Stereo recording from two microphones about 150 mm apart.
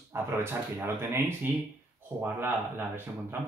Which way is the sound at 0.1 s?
15° right (ahead or behind).